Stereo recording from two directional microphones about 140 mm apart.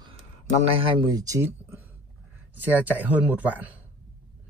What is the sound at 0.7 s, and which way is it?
Speech, 40° right (ahead or behind).